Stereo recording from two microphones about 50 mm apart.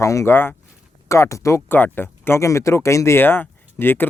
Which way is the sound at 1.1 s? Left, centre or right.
Left.